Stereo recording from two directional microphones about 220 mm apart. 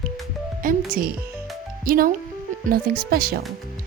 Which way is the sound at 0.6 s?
40° right (ahead or behind).